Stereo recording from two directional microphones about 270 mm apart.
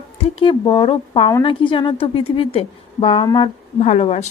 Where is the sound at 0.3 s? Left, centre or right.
Centre.